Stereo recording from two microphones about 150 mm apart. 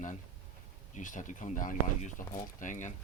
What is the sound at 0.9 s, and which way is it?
Speech, 60° left (ahead or behind).